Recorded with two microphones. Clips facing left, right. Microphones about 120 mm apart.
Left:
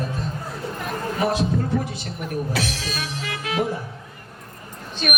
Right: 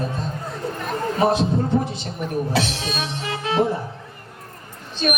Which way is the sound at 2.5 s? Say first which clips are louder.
Right 3 dB; 25° right (ahead or behind).